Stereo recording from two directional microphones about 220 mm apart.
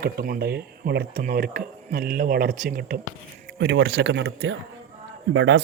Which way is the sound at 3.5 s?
55° right (ahead or behind).